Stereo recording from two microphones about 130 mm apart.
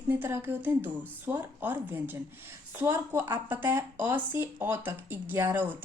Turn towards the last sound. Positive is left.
turn(degrees=-15)  # may be behind; listen again after turning